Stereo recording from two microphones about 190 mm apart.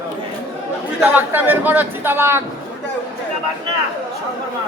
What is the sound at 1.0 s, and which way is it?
A man's voice, 10° right (ahead or behind).